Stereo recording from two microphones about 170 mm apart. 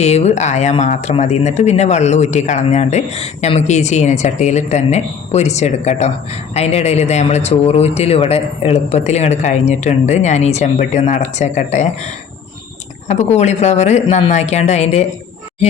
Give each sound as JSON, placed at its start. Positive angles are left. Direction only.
{"t": 0.0, "sound": "speech", "side_deg": 40}
{"t": 13.1, "sound": "speech", "side_deg": 40}